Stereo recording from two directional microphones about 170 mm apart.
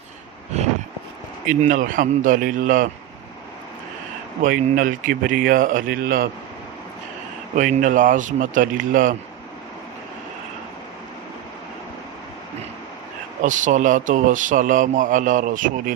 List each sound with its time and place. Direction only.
0.5 s vehicle: 40° right (ahead or behind)
1.5 s a man's voice: 50° right (ahead or behind)
4.7 s speech: 50° right (ahead or behind)
7.5 s a man's voice: 50° right (ahead or behind)
13.4 s a man's voice: 45° right (ahead or behind)